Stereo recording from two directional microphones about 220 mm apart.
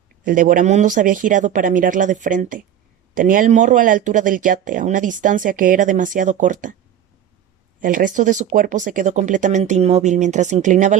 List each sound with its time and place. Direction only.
0.3 s speech: 35° right (ahead or behind)
7.8 s speech: 40° right (ahead or behind)